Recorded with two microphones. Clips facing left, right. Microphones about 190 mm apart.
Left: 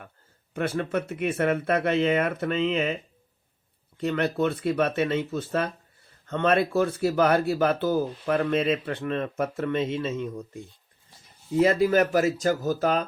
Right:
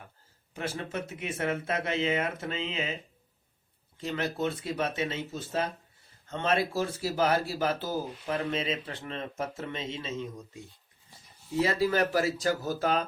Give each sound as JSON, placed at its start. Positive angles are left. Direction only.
{"t": 0.5, "sound": "speech", "side_deg": 60}
{"t": 11.6, "sound": "speech", "side_deg": 50}